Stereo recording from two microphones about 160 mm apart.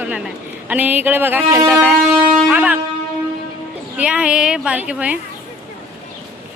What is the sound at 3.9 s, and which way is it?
A woman's voice, 5° right (ahead or behind).